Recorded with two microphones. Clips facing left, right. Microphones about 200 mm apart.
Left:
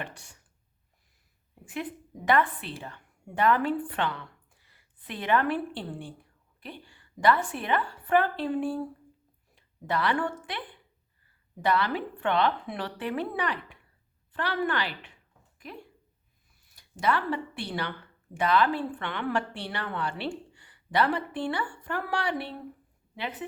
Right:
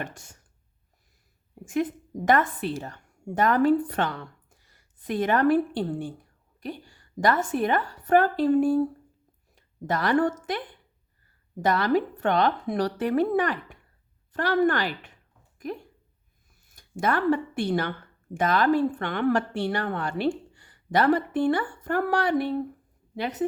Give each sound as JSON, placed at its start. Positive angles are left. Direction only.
{"t": 0.0, "sound": "speech", "side_deg": -45}
{"t": 1.6, "sound": "a woman's voice", "side_deg": -45}